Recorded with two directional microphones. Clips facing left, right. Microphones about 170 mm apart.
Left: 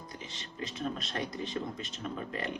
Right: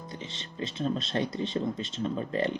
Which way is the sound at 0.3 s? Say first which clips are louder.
Right 5 dB; 25° right (ahead or behind).